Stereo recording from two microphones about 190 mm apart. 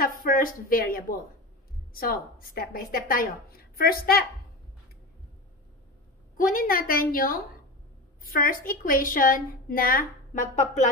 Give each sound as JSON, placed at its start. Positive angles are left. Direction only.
{"t": 0.0, "sound": "a woman's voice", "side_deg": 50}
{"t": 6.3, "sound": "a woman's voice", "side_deg": 45}